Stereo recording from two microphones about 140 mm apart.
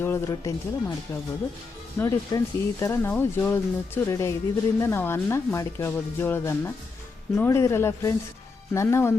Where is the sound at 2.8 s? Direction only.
20° left (ahead or behind).